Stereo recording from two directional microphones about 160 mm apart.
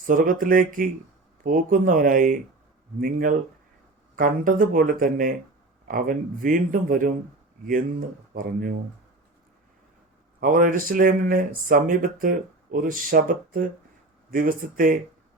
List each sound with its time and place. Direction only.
0.0 s speech: 55° right (ahead or behind)
8.3 s speech: 60° right (ahead or behind)
10.4 s speech: 60° right (ahead or behind)